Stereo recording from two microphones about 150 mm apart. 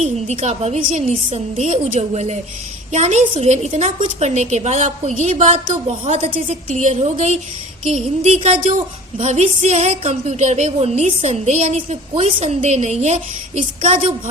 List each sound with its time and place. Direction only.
0.3 s a woman's voice: 45° right (ahead or behind)